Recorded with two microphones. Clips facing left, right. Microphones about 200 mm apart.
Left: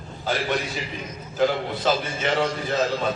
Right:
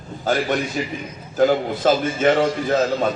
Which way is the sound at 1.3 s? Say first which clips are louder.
Right 5 dB; 50° right (ahead or behind).